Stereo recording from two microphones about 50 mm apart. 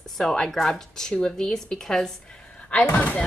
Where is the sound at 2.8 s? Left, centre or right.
Left.